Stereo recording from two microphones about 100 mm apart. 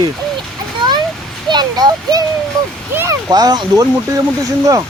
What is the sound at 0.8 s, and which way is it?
Children playing, 50° right (ahead or behind).